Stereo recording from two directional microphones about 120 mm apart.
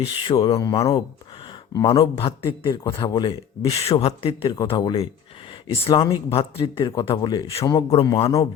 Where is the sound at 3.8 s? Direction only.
60° left (ahead or behind); by 6.2 s 35° left (ahead or behind).